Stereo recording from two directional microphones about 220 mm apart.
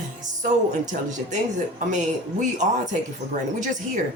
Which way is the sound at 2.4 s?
35° right (ahead or behind).